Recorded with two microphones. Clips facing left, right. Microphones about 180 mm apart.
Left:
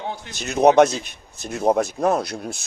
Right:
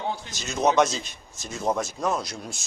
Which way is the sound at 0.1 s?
60° left (ahead or behind).